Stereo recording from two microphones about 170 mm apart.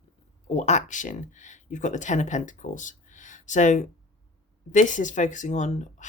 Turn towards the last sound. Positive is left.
turn(degrees=45)  # may be behind; listen again after turning